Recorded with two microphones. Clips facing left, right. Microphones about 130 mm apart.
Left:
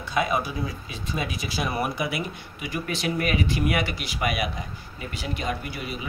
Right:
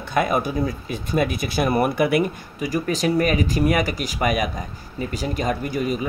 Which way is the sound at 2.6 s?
40° right (ahead or behind).